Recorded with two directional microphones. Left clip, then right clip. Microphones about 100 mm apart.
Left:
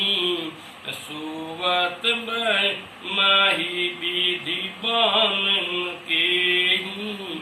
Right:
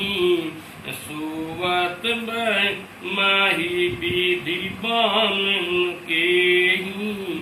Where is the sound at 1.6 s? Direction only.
5° left (ahead or behind).